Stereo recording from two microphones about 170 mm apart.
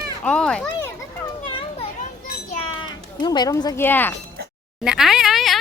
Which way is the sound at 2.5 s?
25° left (ahead or behind).